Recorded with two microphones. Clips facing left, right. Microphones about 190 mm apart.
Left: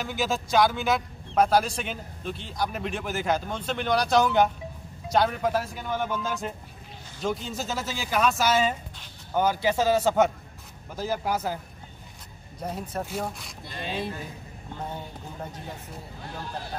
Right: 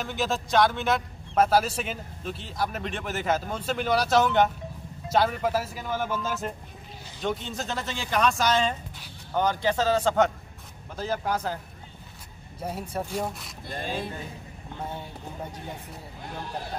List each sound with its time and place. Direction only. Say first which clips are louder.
0.0 s a man's voice: even; centre (ahead or behind)
12.5 s a man's voice: even; 5° right (ahead or behind)
13.7 s speech: right 1 dB; 50° right (ahead or behind)